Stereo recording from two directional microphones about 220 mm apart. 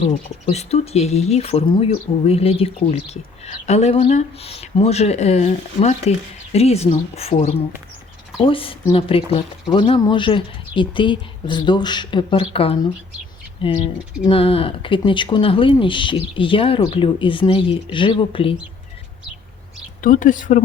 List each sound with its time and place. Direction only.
0.1 s speech: 30° left (ahead or behind)
20.0 s speech: 35° left (ahead or behind)